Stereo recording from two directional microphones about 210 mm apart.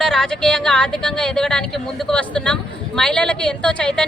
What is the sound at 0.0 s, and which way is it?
Speech, 5° left (ahead or behind).